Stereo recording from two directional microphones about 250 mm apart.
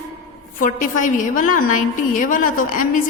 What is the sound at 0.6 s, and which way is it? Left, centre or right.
A woman's voice, left.